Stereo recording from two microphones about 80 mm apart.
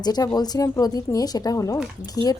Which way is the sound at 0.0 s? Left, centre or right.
Left.